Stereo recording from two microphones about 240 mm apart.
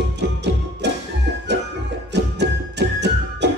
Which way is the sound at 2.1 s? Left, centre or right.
Right.